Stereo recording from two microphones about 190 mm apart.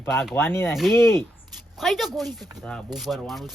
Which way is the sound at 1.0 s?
15° left (ahead or behind).